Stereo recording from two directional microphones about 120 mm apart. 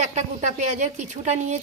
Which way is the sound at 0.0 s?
75° right (ahead or behind).